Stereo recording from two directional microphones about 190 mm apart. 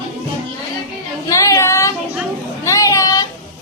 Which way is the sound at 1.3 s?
15° left (ahead or behind).